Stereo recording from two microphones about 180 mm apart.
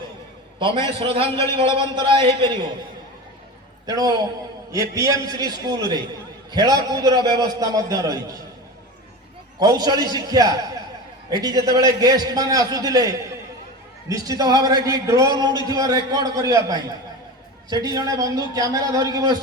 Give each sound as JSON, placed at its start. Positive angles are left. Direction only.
{"t": 0.9, "sound": "a man's voice", "side_deg": -30}
{"t": 3.8, "sound": "a man's voice", "side_deg": -20}
{"t": 9.6, "sound": "a man's voice", "side_deg": -20}
{"t": 17.9, "sound": "a man's voice", "side_deg": -20}